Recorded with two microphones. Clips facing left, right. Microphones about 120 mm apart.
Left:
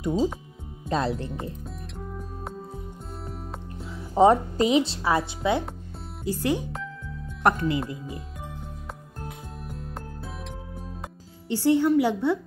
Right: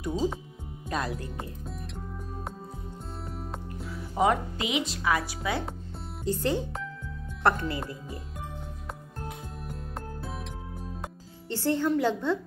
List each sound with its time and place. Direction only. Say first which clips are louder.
0.8 s speech: left 6 dB; 25° left (ahead or behind)
1.3 s music: left 4 dB; centre (ahead or behind)
3.7 s music: even; 25° left (ahead or behind)
4.1 s speech: left 7 dB; 35° left (ahead or behind)
6.2 s a woman's voice: left 2 dB; 10° left (ahead or behind)
9.7 s music: even; centre (ahead or behind)
11.4 s a woman's voice: left 6 dB; 15° left (ahead or behind)